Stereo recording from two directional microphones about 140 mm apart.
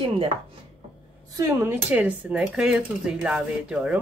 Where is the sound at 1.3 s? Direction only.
25° right (ahead or behind).